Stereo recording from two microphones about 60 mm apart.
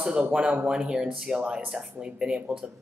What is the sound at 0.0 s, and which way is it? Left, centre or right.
Speech, right.